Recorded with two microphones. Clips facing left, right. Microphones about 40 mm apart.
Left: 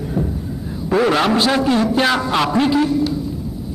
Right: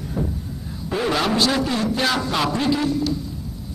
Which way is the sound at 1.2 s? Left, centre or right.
Left.